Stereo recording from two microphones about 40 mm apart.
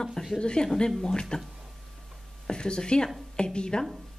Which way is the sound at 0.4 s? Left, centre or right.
Left.